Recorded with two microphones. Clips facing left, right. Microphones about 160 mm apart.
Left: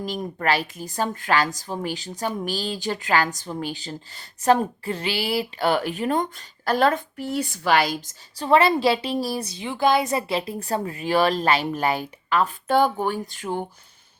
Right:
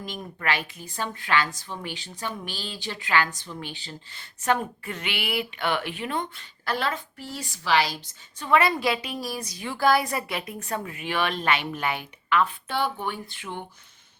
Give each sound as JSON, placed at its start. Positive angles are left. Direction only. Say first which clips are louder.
{"t": 0.0, "sound": "a woman's voice", "louder": "left 6 dB", "side_deg": 40}
{"t": 8.4, "sound": "a woman's voice", "louder": "left 4 dB", "side_deg": 30}